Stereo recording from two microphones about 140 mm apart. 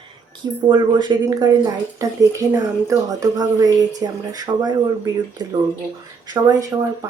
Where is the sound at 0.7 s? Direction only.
35° right (ahead or behind).